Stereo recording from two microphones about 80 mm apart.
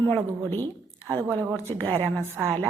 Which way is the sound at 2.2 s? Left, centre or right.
Right.